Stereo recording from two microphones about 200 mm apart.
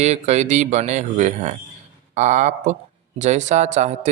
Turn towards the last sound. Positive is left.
turn(degrees=-35)  # may be behind; listen again after turning